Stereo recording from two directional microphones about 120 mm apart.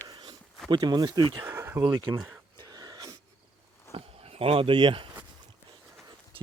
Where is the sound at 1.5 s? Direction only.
20° right (ahead or behind).